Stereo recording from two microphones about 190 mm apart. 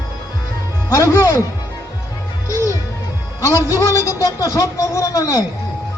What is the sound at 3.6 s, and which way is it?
A child's voice, 15° left (ahead or behind).